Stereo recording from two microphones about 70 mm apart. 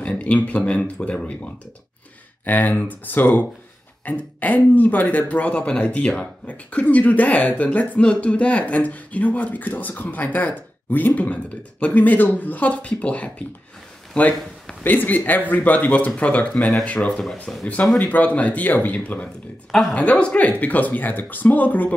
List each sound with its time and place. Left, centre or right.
0.0 s speech: centre
17.1 s speech: centre
17.9 s speech: left